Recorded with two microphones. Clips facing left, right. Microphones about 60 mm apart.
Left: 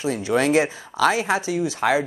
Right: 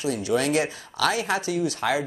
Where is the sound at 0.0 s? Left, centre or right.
Left.